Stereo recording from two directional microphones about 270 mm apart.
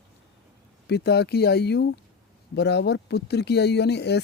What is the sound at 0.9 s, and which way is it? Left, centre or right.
Speech, left.